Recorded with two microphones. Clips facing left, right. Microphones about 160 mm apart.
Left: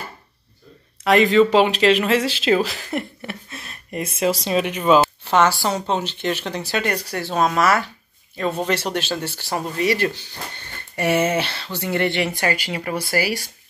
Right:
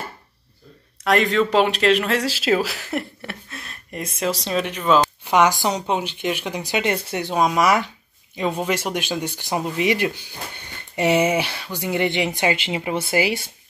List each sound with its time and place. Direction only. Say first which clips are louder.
1.0 s speech: left 4 dB; centre (ahead or behind)
5.2 s speech: even; 15° right (ahead or behind)